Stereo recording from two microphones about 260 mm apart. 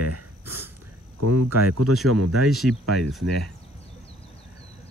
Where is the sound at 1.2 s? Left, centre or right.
Right.